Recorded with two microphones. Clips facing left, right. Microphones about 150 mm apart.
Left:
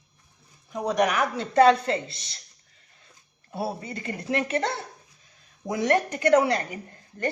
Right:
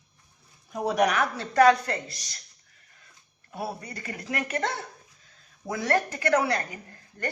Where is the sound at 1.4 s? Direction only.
25° left (ahead or behind).